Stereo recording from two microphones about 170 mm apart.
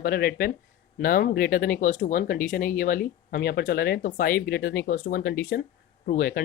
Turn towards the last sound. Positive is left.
turn(degrees=55)  # may be behind; listen again after turning